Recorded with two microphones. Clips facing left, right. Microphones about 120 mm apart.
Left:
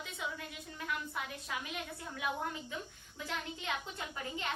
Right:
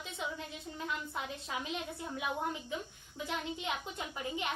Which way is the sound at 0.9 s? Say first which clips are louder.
Even; 25° right (ahead or behind).